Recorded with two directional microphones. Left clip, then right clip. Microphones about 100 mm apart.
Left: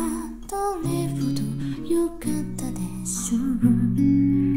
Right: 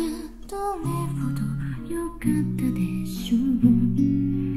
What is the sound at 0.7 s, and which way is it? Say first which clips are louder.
Music: even; 35° left (ahead or behind).